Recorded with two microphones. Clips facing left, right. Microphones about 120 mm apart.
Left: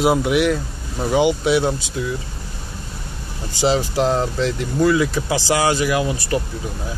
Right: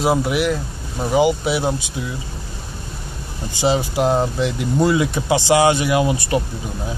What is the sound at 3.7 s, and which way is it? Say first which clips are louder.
Speech: right 1 dB; 10° right (ahead or behind).